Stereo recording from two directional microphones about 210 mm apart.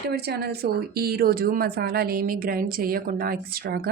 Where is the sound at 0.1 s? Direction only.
50° right (ahead or behind).